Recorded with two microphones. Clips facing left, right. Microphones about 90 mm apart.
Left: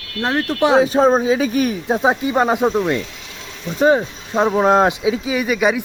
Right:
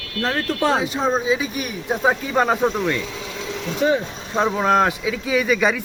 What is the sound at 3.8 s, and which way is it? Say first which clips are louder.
Speech: left 5 dB; 40° left (ahead or behind).